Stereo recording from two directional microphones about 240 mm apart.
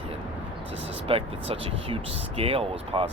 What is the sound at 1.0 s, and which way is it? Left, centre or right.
Speech, right.